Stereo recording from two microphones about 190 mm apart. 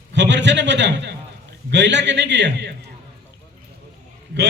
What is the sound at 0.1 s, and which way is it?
A man's voice, 65° right (ahead or behind).